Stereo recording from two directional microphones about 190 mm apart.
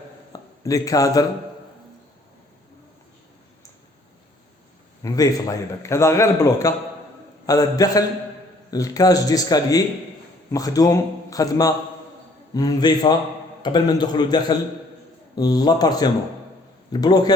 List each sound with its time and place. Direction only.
0.3 s a man's voice: 15° left (ahead or behind)
5.0 s a man's voice: 20° left (ahead or behind)